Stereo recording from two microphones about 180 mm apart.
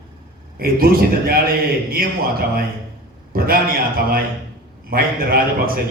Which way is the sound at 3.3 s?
55° right (ahead or behind).